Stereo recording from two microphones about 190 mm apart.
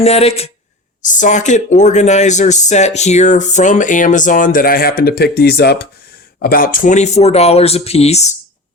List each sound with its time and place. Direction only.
0.0 s speech: 35° left (ahead or behind)